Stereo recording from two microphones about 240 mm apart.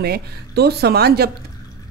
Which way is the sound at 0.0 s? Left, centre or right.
Right.